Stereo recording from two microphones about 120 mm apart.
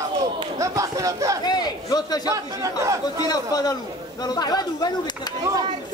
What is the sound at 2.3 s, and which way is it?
Speech, 25° right (ahead or behind).